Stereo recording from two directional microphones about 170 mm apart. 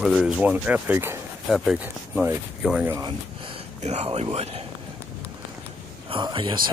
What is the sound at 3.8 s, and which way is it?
Speech, 40° right (ahead or behind).